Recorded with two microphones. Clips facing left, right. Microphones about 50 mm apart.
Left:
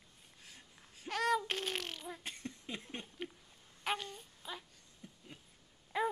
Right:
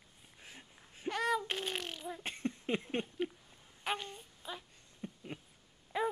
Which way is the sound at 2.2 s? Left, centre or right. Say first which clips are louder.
Right 7 dB; right.